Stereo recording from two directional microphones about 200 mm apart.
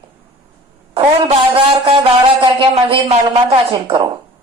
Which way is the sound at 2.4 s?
25° right (ahead or behind).